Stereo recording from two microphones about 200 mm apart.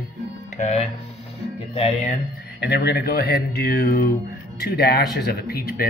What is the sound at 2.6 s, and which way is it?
Speech, 55° left (ahead or behind).